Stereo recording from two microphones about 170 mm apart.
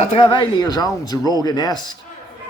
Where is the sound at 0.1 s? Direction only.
25° left (ahead or behind).